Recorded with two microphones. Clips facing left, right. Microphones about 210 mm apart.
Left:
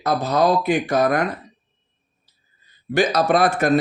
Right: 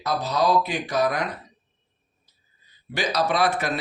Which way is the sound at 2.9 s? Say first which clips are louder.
Left 6 dB; 50° left (ahead or behind).